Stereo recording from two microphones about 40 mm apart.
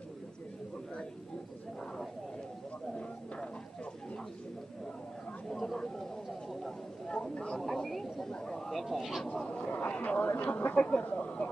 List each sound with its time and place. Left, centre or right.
5.5 s a sound: centre
7.1 s speech: centre
7.5 s speech: centre
8.6 s speech: centre
9.5 s speech: left
11.0 s a sound: left